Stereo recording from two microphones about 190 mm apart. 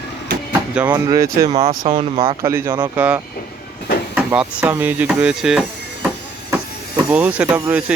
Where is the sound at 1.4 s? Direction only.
35° right (ahead or behind).